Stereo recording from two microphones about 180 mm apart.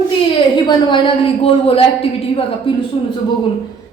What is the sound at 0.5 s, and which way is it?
A woman's voice, 25° left (ahead or behind).